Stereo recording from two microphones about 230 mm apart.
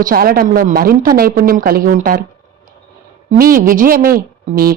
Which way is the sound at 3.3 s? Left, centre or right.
Right.